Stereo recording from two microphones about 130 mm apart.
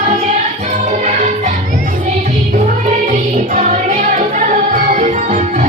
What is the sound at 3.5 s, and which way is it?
Music, 70° right (ahead or behind).